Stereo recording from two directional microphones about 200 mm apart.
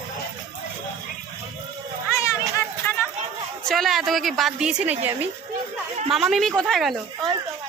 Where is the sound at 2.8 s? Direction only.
10° left (ahead or behind).